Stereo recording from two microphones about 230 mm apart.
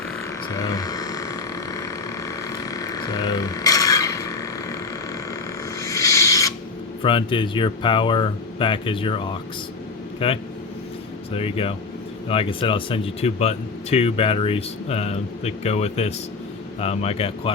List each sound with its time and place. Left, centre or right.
0.5 s burping: centre
5.8 s a sound: centre
7.0 s speech: left